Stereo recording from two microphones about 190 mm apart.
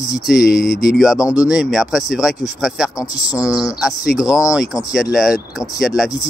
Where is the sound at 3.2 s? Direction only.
20° left (ahead or behind).